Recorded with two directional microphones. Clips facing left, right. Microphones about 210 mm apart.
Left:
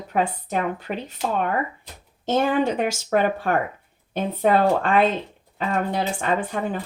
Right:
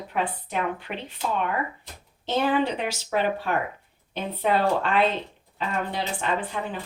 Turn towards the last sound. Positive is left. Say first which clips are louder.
# left 4 dB
turn(degrees=45)  # may be behind; listen again after turning